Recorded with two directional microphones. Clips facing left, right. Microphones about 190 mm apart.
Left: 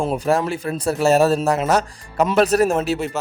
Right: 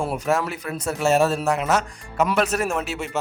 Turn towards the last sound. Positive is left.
turn(degrees=35)  # may be behind; listen again after turning